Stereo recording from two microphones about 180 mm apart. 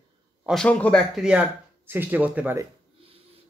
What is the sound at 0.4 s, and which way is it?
Speech, centre (ahead or behind).